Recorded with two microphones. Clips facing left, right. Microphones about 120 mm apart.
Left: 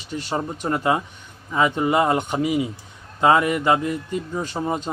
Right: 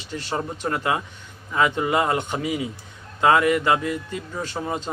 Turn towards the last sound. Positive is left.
turn(degrees=15)  # may be behind; listen again after turning